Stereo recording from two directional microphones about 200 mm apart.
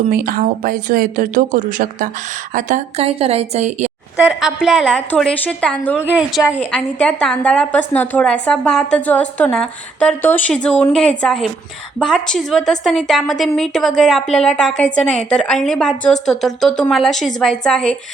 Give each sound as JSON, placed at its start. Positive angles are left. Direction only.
{"t": 0.1, "sound": "a woman's voice", "side_deg": -45}
{"t": 4.2, "sound": "a woman's voice", "side_deg": -5}